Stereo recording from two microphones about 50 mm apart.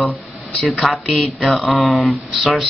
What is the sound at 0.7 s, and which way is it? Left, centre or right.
Speech, centre.